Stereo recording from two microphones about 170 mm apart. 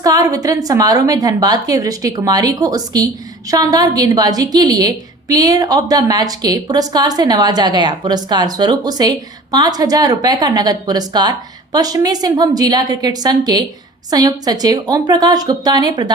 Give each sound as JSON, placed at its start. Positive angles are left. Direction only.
{"t": 0.0, "sound": "a woman's voice", "side_deg": -20}